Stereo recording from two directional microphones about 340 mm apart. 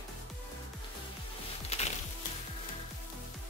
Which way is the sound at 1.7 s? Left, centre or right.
Centre.